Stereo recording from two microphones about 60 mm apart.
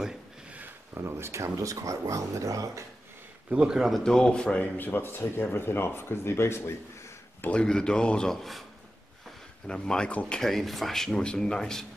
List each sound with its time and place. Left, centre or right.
0.9 s speech: right
3.4 s a man's voice: centre
3.9 s speech: centre
4.7 s speech: left
7.5 s speech: centre
9.7 s speech: centre